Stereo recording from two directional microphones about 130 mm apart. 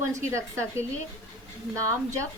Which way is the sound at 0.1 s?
20° right (ahead or behind).